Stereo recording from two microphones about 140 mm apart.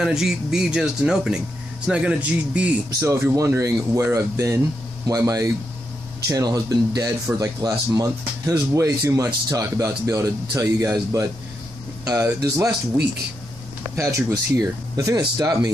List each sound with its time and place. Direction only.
0.0 s speech: 5° right (ahead or behind); by 12.7 s 25° right (ahead or behind)
13.9 s speech: 20° right (ahead or behind)